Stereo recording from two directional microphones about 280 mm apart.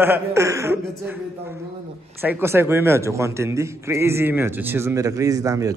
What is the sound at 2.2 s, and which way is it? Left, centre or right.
Speech, centre.